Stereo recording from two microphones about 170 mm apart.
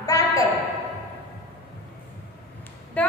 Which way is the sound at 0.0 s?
20° left (ahead or behind).